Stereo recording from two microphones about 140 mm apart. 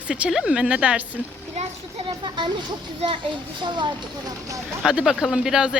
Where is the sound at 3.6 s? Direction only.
35° right (ahead or behind).